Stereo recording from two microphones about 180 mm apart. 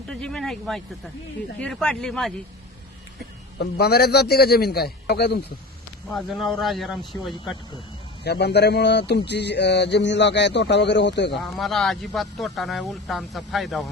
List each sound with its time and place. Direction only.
0.1 s speech: 5° left (ahead or behind)
3.6 s a man's voice: 60° left (ahead or behind)
6.1 s speech: centre (ahead or behind)
8.2 s a sound: 65° left (ahead or behind)
11.5 s speech: centre (ahead or behind)